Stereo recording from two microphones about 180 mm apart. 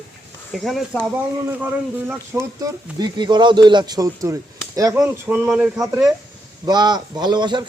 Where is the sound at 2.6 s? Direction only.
25° right (ahead or behind); by 6.1 s centre (ahead or behind).